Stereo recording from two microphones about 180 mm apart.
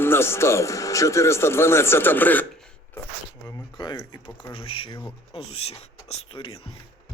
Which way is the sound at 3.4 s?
20° left (ahead or behind).